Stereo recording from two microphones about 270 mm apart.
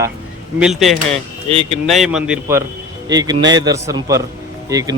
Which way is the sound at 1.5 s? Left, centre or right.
Right.